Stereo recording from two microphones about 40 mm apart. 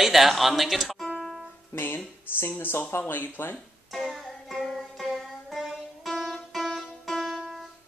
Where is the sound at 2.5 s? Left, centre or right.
Left.